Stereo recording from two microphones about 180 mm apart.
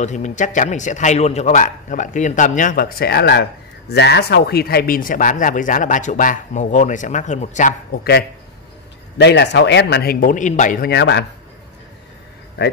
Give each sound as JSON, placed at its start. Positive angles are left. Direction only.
{"t": 0.0, "sound": "speech", "side_deg": 40}
{"t": 8.0, "sound": "speech", "side_deg": 60}
{"t": 9.2, "sound": "speech", "side_deg": 75}
{"t": 10.9, "sound": "speech", "side_deg": 70}